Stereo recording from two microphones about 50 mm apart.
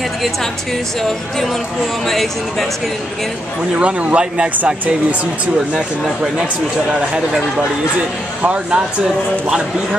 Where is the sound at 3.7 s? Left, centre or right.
Right.